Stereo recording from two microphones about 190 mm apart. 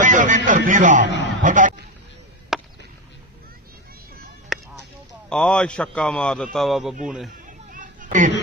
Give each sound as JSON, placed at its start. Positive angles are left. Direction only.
{"t": 0.0, "sound": "a man's voice", "side_deg": -40}
{"t": 2.5, "sound": "chop", "side_deg": 0}
{"t": 4.5, "sound": "honk", "side_deg": 0}
{"t": 5.3, "sound": "a man's voice", "side_deg": 5}
{"t": 7.4, "sound": "chatter", "side_deg": -45}